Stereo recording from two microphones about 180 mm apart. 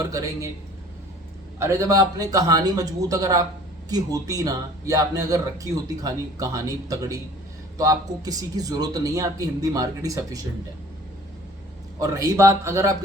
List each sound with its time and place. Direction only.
0.0 s speech: 20° right (ahead or behind)
1.5 s speech: 15° right (ahead or behind)
11.9 s a man's voice: 20° right (ahead or behind)